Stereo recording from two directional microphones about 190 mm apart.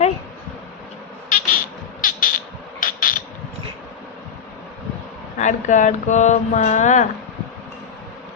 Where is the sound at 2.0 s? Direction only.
45° left (ahead or behind).